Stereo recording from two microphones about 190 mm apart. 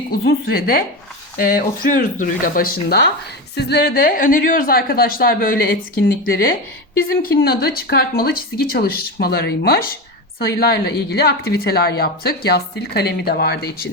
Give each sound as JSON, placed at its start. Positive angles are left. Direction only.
{"t": 0.4, "sound": "speech", "side_deg": 50}